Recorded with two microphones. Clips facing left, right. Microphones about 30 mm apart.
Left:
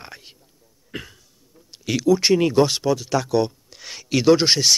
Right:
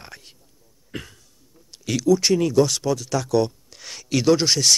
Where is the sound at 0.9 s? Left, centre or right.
Centre.